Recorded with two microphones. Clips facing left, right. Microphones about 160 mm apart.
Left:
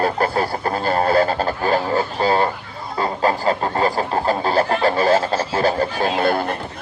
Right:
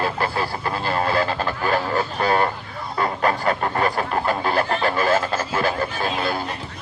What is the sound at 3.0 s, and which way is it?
Chicken, 25° left (ahead or behind).